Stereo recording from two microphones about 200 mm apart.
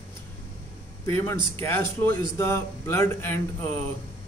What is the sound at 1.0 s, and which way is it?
A man's voice, 15° left (ahead or behind).